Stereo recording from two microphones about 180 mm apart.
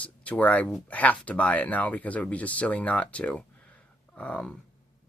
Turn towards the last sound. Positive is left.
turn(degrees=5)  # may be behind; listen again after turning